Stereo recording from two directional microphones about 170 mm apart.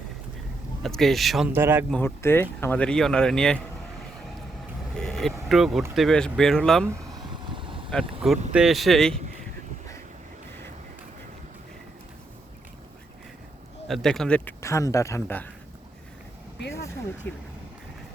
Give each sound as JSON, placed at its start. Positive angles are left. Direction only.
{"t": 0.8, "sound": "speech", "side_deg": 0}
{"t": 1.5, "sound": "speech", "side_deg": -15}
{"t": 1.9, "sound": "speech", "side_deg": 10}
{"t": 4.9, "sound": "vehicle", "side_deg": 0}
{"t": 5.5, "sound": "speech", "side_deg": 0}
{"t": 7.5, "sound": "vehicle", "side_deg": -30}
{"t": 8.5, "sound": "speech", "side_deg": 0}
{"t": 13.8, "sound": "speech", "side_deg": 0}
{"t": 17.2, "sound": "speech", "side_deg": 10}